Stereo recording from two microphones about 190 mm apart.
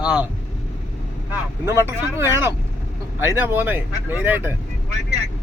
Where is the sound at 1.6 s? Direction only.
15° right (ahead or behind).